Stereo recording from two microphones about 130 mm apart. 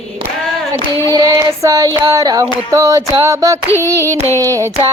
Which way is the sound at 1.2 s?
25° right (ahead or behind).